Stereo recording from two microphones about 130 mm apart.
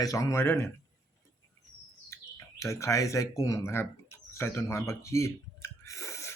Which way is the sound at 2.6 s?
25° left (ahead or behind).